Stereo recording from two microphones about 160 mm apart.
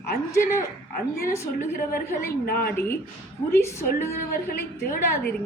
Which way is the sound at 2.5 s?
70° left (ahead or behind).